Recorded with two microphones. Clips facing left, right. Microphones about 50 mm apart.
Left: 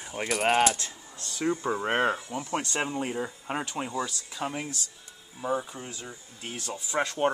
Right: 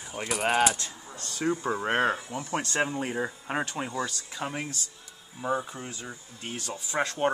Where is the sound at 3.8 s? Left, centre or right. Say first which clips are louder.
Even; centre.